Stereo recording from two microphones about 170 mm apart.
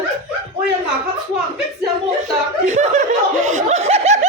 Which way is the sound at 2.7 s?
45° right (ahead or behind).